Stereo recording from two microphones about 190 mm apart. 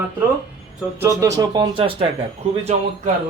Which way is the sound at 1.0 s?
15° right (ahead or behind).